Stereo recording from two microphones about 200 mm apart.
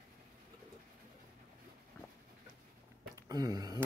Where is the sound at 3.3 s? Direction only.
20° right (ahead or behind).